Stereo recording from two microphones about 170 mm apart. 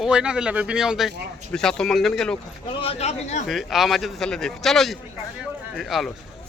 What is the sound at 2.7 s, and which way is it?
Speech, 35° left (ahead or behind).